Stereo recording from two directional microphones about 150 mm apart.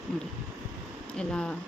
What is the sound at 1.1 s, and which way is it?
Speech, 5° left (ahead or behind).